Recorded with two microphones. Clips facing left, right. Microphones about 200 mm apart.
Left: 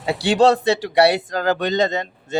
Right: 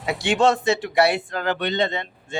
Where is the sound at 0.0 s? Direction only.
35° left (ahead or behind).